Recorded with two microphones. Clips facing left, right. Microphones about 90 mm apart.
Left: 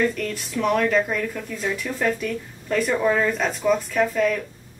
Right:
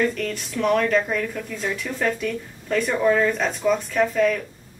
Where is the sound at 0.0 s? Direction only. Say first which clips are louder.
Even; centre (ahead or behind).